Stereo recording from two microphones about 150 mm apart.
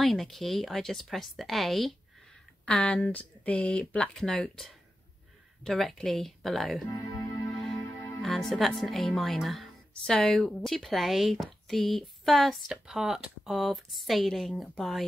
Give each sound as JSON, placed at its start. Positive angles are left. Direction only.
{"t": 0.0, "sound": "speech", "side_deg": 0}
{"t": 6.9, "sound": "music", "side_deg": 25}
{"t": 7.5, "sound": "music", "side_deg": 0}
{"t": 8.2, "sound": "speech", "side_deg": 0}